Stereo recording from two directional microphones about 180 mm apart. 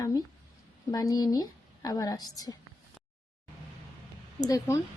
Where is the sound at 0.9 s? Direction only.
20° left (ahead or behind).